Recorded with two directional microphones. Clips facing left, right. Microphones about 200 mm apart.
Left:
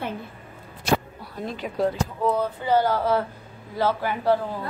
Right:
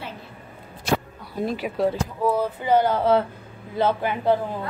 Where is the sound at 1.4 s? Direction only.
10° right (ahead or behind).